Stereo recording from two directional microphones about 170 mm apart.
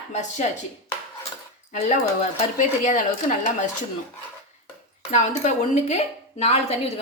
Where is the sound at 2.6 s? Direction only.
45° left (ahead or behind).